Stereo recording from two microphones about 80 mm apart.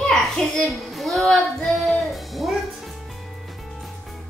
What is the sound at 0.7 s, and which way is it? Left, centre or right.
Music, centre.